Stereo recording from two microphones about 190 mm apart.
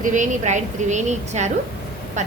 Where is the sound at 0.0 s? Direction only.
40° right (ahead or behind).